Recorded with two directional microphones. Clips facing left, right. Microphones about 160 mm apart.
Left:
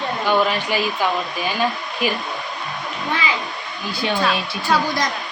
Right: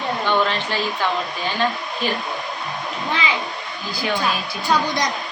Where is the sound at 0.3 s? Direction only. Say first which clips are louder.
Left 3 dB; 10° left (ahead or behind).